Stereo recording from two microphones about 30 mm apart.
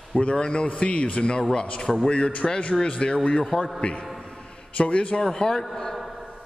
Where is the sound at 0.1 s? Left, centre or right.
Left.